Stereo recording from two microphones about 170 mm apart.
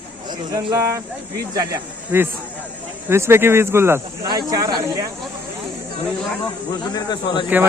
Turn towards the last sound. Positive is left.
turn(degrees=25)  # may be behind; listen again after turning